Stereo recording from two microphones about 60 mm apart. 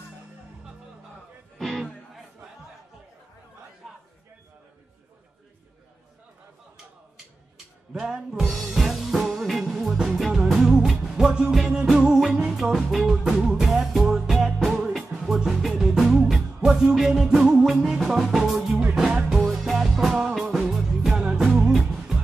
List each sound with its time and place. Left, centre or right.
1.6 s music: centre
7.5 s music: centre